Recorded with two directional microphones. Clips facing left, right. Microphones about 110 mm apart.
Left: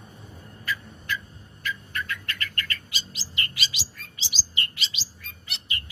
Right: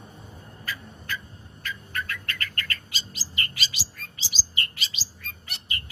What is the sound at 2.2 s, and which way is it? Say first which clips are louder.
Bird: even; 40° right (ahead or behind).